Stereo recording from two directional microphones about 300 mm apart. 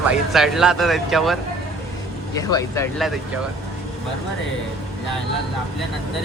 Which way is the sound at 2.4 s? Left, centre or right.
Centre.